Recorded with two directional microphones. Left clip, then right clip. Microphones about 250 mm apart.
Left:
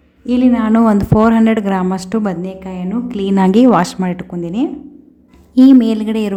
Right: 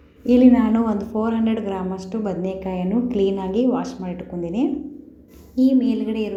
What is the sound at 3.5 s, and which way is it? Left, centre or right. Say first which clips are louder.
Speech: left 10 dB; left.